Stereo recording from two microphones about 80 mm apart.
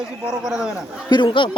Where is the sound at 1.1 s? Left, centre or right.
Left.